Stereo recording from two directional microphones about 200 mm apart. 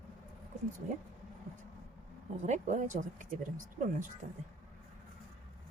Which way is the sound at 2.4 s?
35° right (ahead or behind).